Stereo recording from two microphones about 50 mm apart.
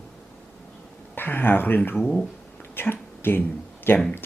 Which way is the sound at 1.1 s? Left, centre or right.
Left.